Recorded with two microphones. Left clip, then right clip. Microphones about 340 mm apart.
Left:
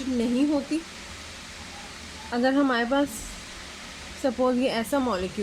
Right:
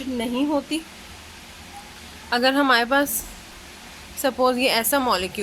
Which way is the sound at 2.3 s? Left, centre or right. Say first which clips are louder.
Right 5 dB; right.